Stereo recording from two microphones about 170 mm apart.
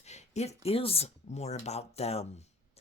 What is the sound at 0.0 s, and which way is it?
Speech, 40° left (ahead or behind).